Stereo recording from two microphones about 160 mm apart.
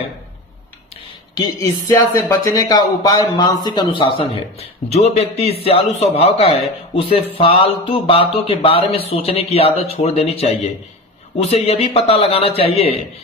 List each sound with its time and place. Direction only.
1.4 s speech: 20° left (ahead or behind); by 12.9 s 35° left (ahead or behind)